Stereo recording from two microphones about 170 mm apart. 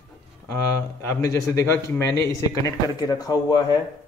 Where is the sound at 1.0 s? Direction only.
15° left (ahead or behind).